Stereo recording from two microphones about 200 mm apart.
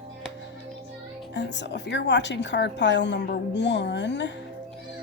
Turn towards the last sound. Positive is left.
turn(degrees=60)  # may be behind; listen again after turning